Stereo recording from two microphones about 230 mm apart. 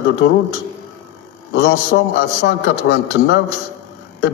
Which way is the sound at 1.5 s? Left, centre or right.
Left.